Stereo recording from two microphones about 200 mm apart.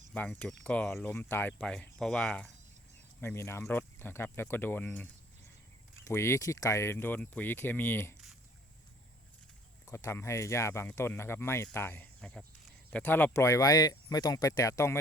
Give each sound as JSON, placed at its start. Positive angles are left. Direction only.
{"t": 0.1, "sound": "speech", "side_deg": 5}
{"t": 9.8, "sound": "speech", "side_deg": 15}